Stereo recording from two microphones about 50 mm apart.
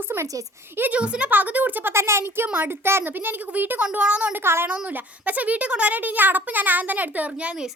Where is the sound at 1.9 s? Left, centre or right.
Right.